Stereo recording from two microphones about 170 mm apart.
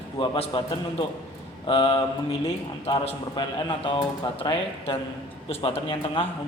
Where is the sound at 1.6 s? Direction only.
30° left (ahead or behind).